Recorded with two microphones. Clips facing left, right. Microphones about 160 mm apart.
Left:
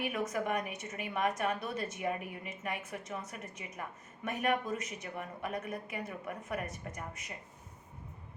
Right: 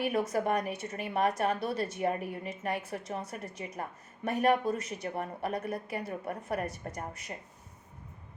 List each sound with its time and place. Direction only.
0.0 s a woman's voice: 35° right (ahead or behind)